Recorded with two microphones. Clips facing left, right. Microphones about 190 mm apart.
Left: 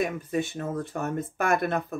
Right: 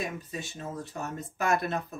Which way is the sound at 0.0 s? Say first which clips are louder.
Left 8 dB; 55° left (ahead or behind).